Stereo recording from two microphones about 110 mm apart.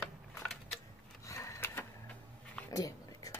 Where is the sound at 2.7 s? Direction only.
30° left (ahead or behind).